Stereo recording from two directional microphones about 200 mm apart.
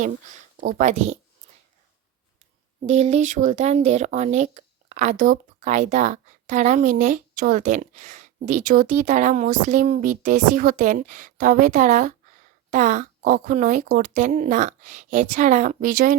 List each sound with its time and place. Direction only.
0.5 s speech: 40° right (ahead or behind)
2.8 s speech: 35° right (ahead or behind)